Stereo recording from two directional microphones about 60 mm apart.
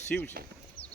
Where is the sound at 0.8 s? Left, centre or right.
Left.